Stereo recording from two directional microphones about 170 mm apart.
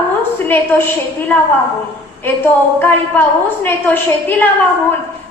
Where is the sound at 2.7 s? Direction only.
15° left (ahead or behind).